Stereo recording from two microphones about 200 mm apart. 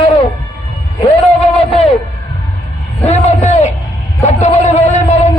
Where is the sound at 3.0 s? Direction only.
30° left (ahead or behind).